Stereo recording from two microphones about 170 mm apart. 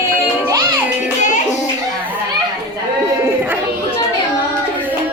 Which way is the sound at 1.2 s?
45° left (ahead or behind).